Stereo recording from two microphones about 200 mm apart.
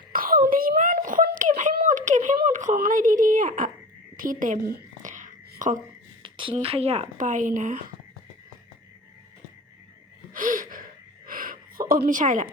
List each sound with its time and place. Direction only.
0.1 s a sound: 45° right (ahead or behind)
6.2 s speech: 25° right (ahead or behind); by 7.9 s 40° right (ahead or behind)
10.3 s gasp: 45° right (ahead or behind)
12.0 s speech: 40° right (ahead or behind)